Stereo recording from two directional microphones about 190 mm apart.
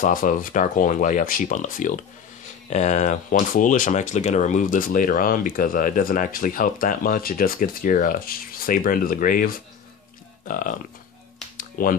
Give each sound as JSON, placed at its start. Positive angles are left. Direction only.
{"t": 0.0, "sound": "speech", "side_deg": 45}
{"t": 11.5, "sound": "finger snapping", "side_deg": 45}